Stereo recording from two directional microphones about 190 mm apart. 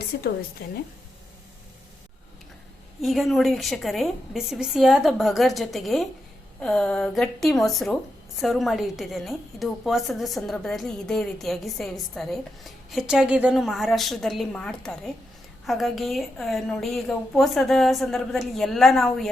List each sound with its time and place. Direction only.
0.1 s a woman's voice: 60° left (ahead or behind)
3.0 s a woman's voice: centre (ahead or behind)